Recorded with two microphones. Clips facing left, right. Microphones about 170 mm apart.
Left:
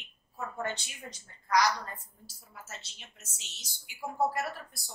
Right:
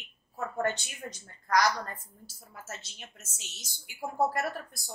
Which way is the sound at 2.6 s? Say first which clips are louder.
Right 6 dB; 50° right (ahead or behind).